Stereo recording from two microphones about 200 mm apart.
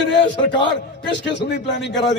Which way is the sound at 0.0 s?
60° left (ahead or behind).